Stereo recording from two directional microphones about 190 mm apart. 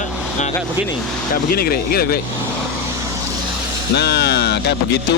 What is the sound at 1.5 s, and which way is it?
Speech, 50° left (ahead or behind).